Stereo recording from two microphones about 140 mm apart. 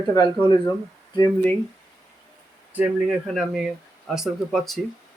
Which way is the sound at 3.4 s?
Centre (ahead or behind).